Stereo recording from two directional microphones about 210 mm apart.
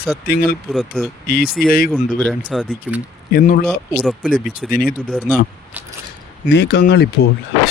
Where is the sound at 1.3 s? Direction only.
45° left (ahead or behind).